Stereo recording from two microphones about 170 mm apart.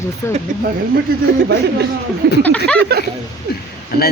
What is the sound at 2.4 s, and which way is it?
Speech, 10° left (ahead or behind).